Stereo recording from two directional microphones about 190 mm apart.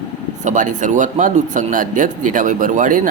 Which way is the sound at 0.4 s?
40° right (ahead or behind).